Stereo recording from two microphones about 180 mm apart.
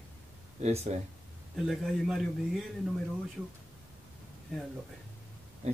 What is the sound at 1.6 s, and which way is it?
Speech, centre (ahead or behind).